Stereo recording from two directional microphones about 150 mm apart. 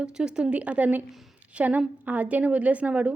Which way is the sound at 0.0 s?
5° right (ahead or behind).